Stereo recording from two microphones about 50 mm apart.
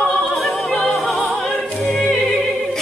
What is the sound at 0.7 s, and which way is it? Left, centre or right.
Opera, centre.